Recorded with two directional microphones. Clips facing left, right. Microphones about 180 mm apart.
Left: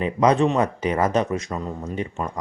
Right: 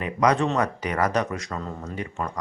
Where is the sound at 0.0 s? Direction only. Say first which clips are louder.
Left 4 dB; 25° left (ahead or behind).